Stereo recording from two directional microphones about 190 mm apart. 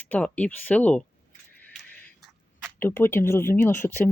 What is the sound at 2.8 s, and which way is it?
Speech, 10° left (ahead or behind).